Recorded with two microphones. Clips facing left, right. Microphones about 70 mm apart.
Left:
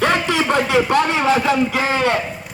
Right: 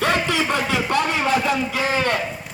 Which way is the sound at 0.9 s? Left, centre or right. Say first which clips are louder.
Left 4 dB; left.